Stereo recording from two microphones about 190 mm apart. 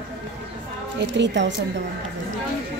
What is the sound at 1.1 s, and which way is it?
Speech, 70° right (ahead or behind).